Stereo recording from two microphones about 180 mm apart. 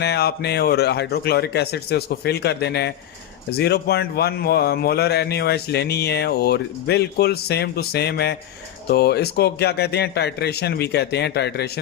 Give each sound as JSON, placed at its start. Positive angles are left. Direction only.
{"t": 0.0, "sound": "a man's voice", "side_deg": 65}